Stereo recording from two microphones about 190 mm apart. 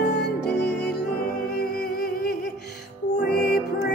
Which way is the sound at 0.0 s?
60° left (ahead or behind).